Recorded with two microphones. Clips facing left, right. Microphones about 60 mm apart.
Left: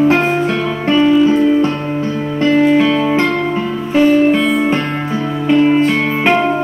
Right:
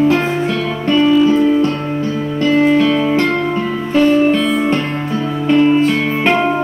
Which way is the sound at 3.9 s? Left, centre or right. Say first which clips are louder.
Left 1 dB; centre.